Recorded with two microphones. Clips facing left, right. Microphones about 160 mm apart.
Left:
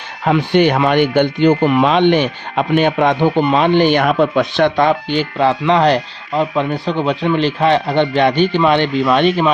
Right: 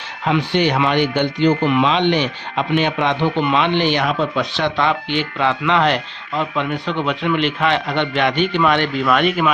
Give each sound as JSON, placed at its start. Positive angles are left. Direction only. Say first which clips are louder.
{"t": 0.3, "sound": "speech", "louder": "left 5 dB", "side_deg": 50}